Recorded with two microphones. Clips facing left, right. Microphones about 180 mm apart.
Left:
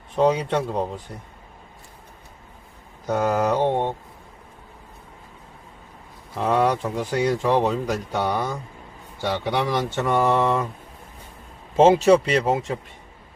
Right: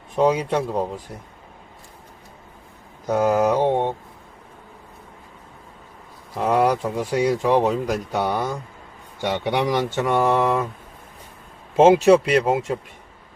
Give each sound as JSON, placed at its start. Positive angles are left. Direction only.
{"t": 0.2, "sound": "speech", "side_deg": -10}
{"t": 3.1, "sound": "speech", "side_deg": -10}
{"t": 6.3, "sound": "speech", "side_deg": -10}
{"t": 11.8, "sound": "speech", "side_deg": -10}